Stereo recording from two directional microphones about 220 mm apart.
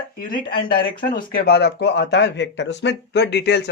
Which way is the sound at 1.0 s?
40° left (ahead or behind).